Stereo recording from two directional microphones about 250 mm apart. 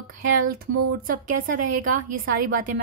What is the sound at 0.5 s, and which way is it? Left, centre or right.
A woman's voice, right.